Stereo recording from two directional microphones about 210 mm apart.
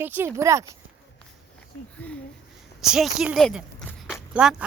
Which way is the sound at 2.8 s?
Centre (ahead or behind).